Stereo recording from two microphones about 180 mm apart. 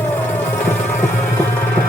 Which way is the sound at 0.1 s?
10° left (ahead or behind).